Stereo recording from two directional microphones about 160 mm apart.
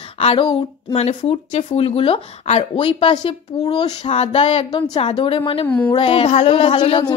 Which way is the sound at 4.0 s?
40° left (ahead or behind).